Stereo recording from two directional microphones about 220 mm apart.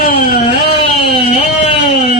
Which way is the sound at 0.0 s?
40° left (ahead or behind).